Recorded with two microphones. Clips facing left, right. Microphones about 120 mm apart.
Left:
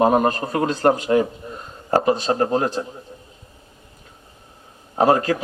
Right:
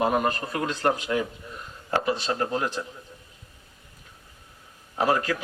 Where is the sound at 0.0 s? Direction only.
40° left (ahead or behind).